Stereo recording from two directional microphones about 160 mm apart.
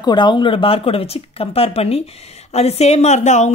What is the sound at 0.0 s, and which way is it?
Speech, 30° left (ahead or behind).